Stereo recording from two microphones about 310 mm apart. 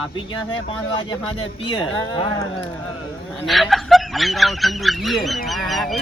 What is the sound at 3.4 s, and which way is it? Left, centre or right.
Speech, centre.